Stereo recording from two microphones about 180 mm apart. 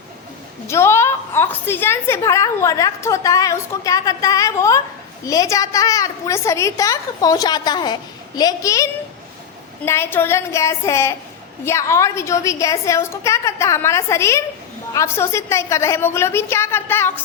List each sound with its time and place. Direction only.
0.7 s a woman's voice: 15° left (ahead or behind)